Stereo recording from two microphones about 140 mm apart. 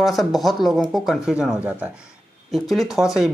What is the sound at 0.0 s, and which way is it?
Speech, centre (ahead or behind).